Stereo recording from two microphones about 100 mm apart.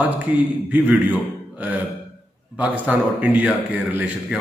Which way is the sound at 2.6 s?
15° right (ahead or behind).